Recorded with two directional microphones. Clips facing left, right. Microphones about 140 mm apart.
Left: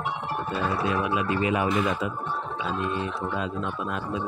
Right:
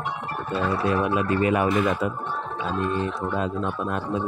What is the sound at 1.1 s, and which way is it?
Speech, 45° right (ahead or behind).